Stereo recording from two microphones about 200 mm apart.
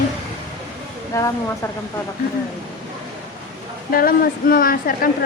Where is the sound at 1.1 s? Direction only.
15° left (ahead or behind).